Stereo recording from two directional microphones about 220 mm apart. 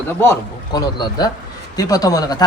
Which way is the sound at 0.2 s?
15° left (ahead or behind).